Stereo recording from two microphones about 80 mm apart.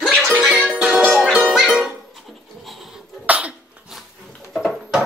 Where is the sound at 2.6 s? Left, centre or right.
Centre.